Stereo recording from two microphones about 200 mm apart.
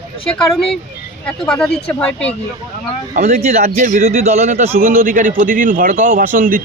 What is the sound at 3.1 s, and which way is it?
A man's voice, 35° right (ahead or behind).